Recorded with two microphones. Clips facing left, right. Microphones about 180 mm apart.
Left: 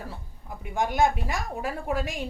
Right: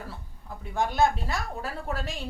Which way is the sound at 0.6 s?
15° left (ahead or behind).